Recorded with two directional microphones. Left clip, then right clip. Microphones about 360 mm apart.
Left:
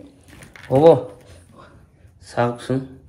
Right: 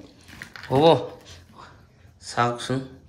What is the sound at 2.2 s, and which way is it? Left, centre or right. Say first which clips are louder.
Speech: left 2 dB; centre.